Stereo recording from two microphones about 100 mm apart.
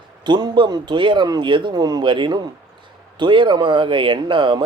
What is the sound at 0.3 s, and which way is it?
Speech, 45° right (ahead or behind).